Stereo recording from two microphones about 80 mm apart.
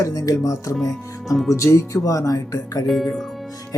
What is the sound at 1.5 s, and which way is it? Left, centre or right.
Speech, left.